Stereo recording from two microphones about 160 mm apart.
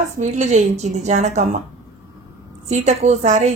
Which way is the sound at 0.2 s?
45° right (ahead or behind).